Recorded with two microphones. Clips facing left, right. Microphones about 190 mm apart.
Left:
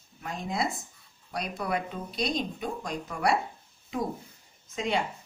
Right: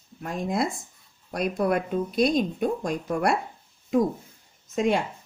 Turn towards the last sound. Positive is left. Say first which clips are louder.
# right 7 dB
turn(degrees=-50)  # may be behind; listen again after turning